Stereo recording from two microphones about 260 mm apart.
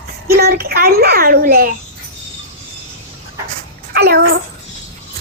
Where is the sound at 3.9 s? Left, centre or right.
Right.